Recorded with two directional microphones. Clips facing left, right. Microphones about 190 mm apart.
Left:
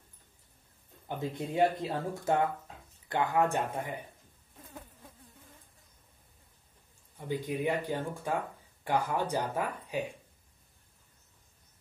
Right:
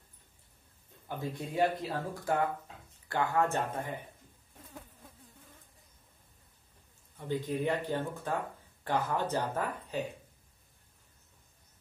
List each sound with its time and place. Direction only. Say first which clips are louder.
1.0 s speech: left 2 dB; 20° left (ahead or behind)
7.2 s speech: even; 10° left (ahead or behind)